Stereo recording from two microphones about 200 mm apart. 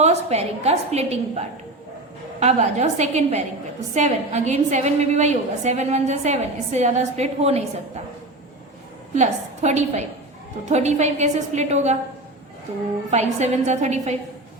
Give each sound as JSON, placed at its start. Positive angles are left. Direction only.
{"t": 0.0, "sound": "a woman's voice", "side_deg": -35}
{"t": 9.1, "sound": "a woman's voice", "side_deg": -35}
{"t": 13.1, "sound": "a woman's voice", "side_deg": -35}